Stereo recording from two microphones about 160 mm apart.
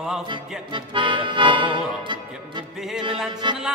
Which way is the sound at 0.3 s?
30° right (ahead or behind).